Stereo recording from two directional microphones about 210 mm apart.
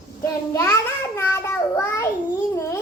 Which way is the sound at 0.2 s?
15° left (ahead or behind).